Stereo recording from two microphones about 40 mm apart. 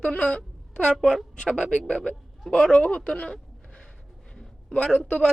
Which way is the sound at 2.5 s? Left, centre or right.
Left.